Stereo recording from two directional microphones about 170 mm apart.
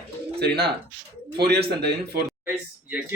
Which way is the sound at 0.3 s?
70° right (ahead or behind).